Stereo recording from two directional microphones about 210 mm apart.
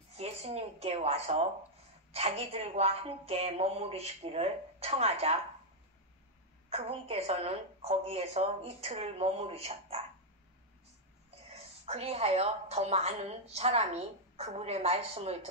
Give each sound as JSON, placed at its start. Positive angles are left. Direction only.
{"t": 0.1, "sound": "a woman's voice", "side_deg": -30}
{"t": 6.7, "sound": "a woman's voice", "side_deg": -30}
{"t": 11.5, "sound": "a woman's voice", "side_deg": -30}